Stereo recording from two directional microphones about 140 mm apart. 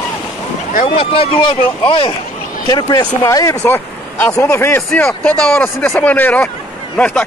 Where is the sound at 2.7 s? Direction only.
30° left (ahead or behind).